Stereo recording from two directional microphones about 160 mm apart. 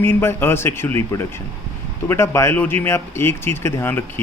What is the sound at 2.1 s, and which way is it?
Speech, 15° left (ahead or behind).